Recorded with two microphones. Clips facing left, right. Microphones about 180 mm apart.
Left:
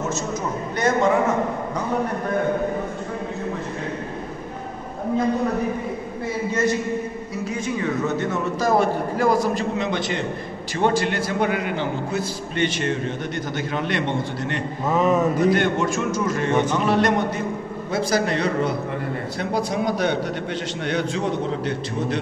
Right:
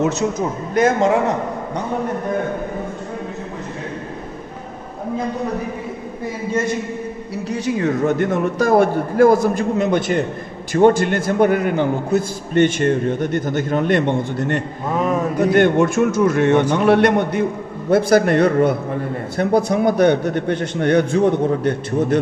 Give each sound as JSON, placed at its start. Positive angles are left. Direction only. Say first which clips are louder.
{"t": 0.7, "sound": "a man's voice", "louder": "right 4 dB", "side_deg": -90}
{"t": 7.4, "sound": "a man's voice", "louder": "right 6 dB", "side_deg": -75}
{"t": 7.8, "sound": "a man's voice", "louder": "right 6 dB", "side_deg": -50}
{"t": 14.9, "sound": "a sound", "louder": "left 1 dB", "side_deg": 0}
{"t": 15.5, "sound": "a man's voice", "louder": "right 7 dB", "side_deg": -55}